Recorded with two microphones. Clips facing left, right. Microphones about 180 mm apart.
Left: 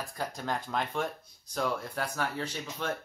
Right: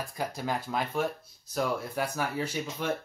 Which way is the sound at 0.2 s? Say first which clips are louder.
Right 2 dB; 10° right (ahead or behind).